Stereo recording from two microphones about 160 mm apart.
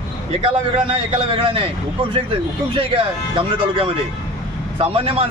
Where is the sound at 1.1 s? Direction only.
35° right (ahead or behind).